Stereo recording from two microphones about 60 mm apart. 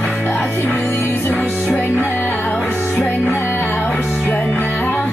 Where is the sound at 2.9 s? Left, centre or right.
Left.